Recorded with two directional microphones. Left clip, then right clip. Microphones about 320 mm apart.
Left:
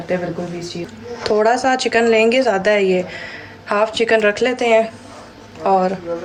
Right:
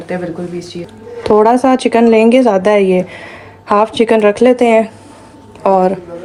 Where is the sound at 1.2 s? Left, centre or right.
Centre.